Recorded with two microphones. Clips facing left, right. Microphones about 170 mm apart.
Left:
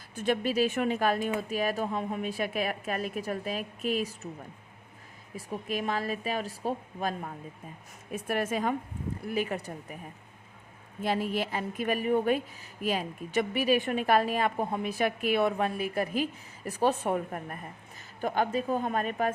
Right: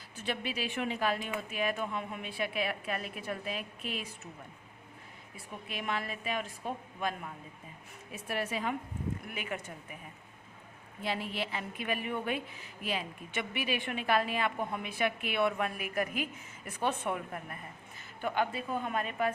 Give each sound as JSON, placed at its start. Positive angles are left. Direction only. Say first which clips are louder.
{"t": 0.2, "sound": "a woman's voice", "louder": "left 9 dB", "side_deg": 45}
{"t": 5.6, "sound": "a woman's voice", "louder": "left 5 dB", "side_deg": 40}
{"t": 8.1, "sound": "a woman's voice", "louder": "left 6 dB", "side_deg": 50}
{"t": 9.2, "sound": "a woman's voice", "louder": "left 8 dB", "side_deg": 35}
{"t": 11.0, "sound": "a woman's voice", "louder": "left 6 dB", "side_deg": 45}